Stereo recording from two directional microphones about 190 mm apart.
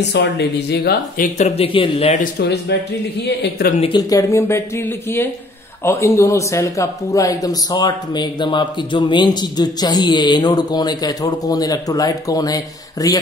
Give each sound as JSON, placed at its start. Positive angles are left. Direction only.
{"t": 0.1, "sound": "speech", "side_deg": 60}
{"t": 3.3, "sound": "speech", "side_deg": 60}
{"t": 3.8, "sound": "speech", "side_deg": 20}